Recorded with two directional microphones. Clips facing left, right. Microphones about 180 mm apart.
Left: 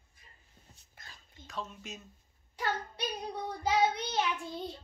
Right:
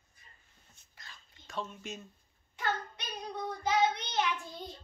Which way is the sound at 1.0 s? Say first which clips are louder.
Even; 50° left (ahead or behind).